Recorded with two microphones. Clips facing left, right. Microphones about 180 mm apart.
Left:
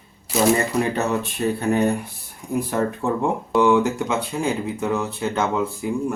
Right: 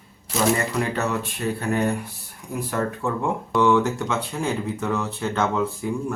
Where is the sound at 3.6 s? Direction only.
10° left (ahead or behind).